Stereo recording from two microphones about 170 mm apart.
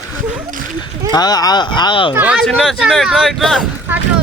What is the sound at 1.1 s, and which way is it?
Speech, 25° left (ahead or behind).